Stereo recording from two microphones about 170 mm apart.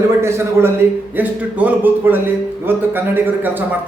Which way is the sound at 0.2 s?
15° right (ahead or behind).